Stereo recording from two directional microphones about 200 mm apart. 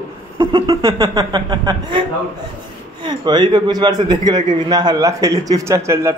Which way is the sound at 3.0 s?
20° right (ahead or behind).